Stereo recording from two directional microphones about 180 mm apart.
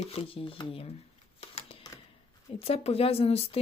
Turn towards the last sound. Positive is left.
turn(degrees=35)  # may be behind; listen again after turning